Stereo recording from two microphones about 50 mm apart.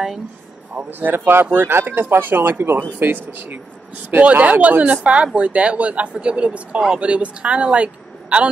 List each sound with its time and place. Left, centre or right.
0.8 s speech: right
2.6 s speech: right
3.0 s a man's voice: right